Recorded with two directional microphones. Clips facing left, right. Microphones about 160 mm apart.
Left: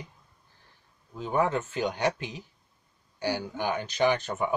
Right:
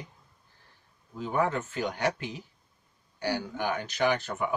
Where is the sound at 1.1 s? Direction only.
20° left (ahead or behind).